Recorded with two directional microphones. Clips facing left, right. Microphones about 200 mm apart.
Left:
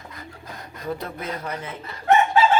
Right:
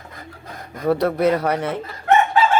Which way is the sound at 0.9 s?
75° right (ahead or behind).